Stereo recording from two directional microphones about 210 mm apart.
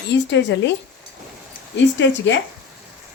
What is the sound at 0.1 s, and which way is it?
Speech, 55° left (ahead or behind).